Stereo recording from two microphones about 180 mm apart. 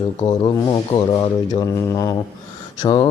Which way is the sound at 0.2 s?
20° left (ahead or behind).